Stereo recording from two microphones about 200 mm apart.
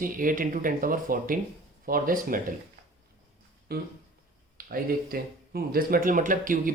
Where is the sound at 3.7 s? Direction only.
50° right (ahead or behind).